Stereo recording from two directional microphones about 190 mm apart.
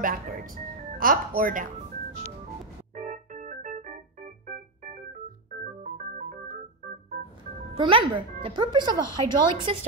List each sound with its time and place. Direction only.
0.0 s a woman's voice: 50° right (ahead or behind)
2.9 s organ: 40° right (ahead or behind)
5.6 s organ: 40° right (ahead or behind)
7.7 s speech: 25° right (ahead or behind)